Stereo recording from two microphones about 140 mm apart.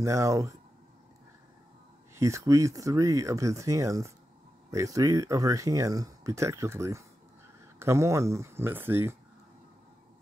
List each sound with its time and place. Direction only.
0.0 s speech: 20° right (ahead or behind)
2.1 s speech: 20° right (ahead or behind)